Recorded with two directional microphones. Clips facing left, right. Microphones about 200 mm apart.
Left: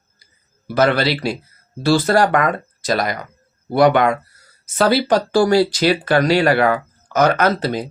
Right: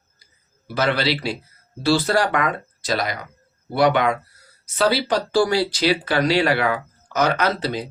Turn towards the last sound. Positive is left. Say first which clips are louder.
# left 4 dB
turn(degrees=45)  # may be behind; listen again after turning